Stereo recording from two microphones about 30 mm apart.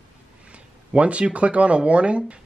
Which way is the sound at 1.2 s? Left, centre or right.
Right.